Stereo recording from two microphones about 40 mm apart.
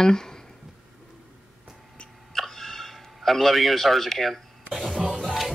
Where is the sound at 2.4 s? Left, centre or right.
Centre.